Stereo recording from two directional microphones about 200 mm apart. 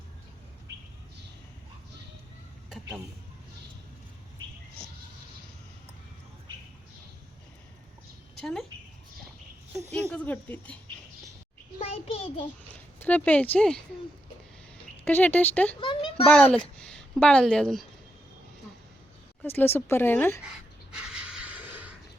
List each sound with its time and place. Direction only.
8.4 s speech: centre (ahead or behind)
9.9 s speech: 5° left (ahead or behind)
11.8 s a sound: 30° left (ahead or behind)
13.0 s speech: 10° left (ahead or behind)
15.0 s speech: 10° left (ahead or behind)
15.8 s a child's voice: 25° left (ahead or behind)
16.3 s a woman's voice: 5° left (ahead or behind)
19.4 s speech: 10° left (ahead or behind)
20.4 s a sound: 5° right (ahead or behind)